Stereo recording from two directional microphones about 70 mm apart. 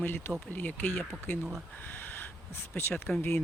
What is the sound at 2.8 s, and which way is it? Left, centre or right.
Speech, left.